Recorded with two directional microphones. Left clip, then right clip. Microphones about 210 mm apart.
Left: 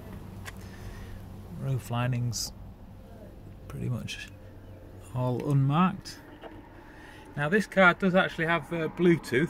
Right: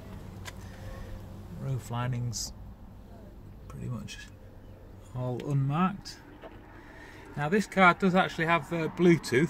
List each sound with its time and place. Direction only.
1.6 s speech: 15° left (ahead or behind)
3.8 s speech: 35° left (ahead or behind)
7.3 s speech: 15° left (ahead or behind); by 9.5 s 10° right (ahead or behind)